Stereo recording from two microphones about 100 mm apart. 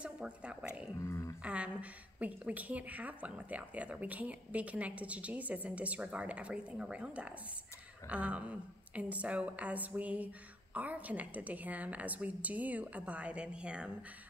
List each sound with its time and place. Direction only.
0.0 s a woman's voice: 10° right (ahead or behind)
0.9 s speech: 25° left (ahead or behind)
1.4 s a woman's voice: 15° right (ahead or behind)